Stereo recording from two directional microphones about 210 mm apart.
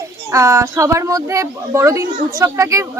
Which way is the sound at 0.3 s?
15° right (ahead or behind).